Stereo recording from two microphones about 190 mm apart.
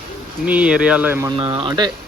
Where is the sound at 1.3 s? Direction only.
25° right (ahead or behind).